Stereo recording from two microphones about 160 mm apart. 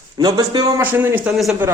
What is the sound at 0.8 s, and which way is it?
Speech, 10° right (ahead or behind).